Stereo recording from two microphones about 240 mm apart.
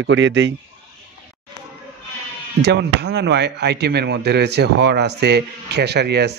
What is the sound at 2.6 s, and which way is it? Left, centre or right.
Speech, right.